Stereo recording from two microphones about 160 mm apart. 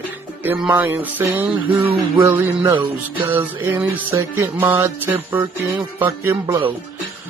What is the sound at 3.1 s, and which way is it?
Speech, 10° right (ahead or behind).